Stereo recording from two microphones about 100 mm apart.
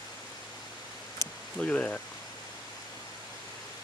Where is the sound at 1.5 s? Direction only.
15° left (ahead or behind).